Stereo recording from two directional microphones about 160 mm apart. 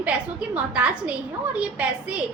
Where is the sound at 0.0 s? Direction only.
5° right (ahead or behind).